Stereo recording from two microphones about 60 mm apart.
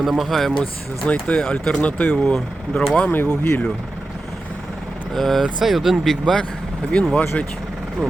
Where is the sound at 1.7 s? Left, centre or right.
Left.